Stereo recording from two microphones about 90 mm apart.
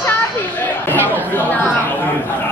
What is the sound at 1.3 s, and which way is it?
Speech, 20° left (ahead or behind).